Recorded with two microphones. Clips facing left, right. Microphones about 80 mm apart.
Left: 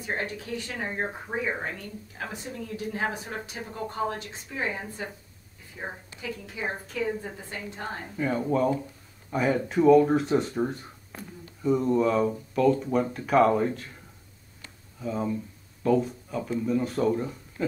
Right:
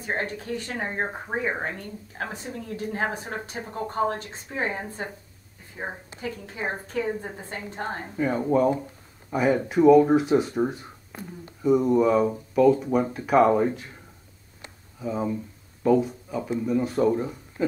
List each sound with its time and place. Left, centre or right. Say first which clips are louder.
0.0 s a woman's voice: right 2 dB; right
1.0 s a woman's voice: right 2 dB; centre
1.6 s a woman's voice: right 3 dB; right
6.2 s a woman's voice: right 2 dB; right
8.2 s speech: right 3 dB; centre
15.0 s speech: right 2 dB; centre